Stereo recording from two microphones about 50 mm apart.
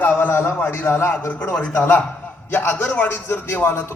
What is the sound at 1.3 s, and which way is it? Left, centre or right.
Speech, left.